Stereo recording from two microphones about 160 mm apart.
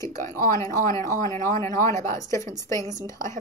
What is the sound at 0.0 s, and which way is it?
A woman's voice, 20° left (ahead or behind).